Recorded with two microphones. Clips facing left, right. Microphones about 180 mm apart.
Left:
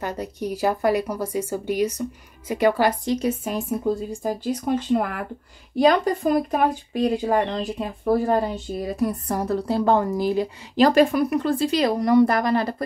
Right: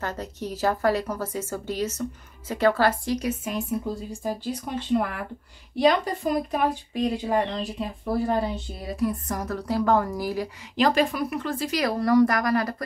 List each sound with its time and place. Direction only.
0.0 s speech: 15° left (ahead or behind)
3.2 s speech: 30° left (ahead or behind)
4.6 s speech: 45° left (ahead or behind)
8.7 s speech: 40° left (ahead or behind); by 10.5 s 25° left (ahead or behind)
10.8 s speech: 45° left (ahead or behind); by 12.8 s 25° left (ahead or behind)